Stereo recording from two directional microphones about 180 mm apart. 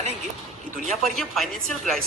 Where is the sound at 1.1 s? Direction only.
Centre (ahead or behind).